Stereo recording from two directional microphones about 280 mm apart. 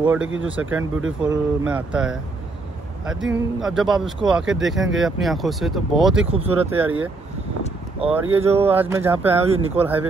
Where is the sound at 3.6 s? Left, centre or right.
Centre.